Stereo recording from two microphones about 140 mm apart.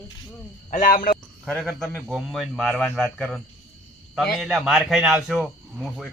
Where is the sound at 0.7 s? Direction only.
70° left (ahead or behind).